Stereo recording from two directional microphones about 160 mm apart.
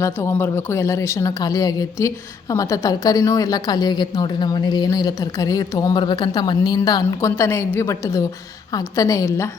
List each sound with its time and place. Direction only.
0.0 s speech: 15° left (ahead or behind)